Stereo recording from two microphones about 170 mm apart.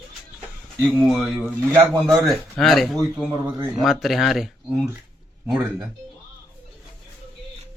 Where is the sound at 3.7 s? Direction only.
Centre (ahead or behind).